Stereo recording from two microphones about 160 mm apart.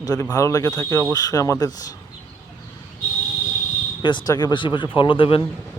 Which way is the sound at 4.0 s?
30° left (ahead or behind).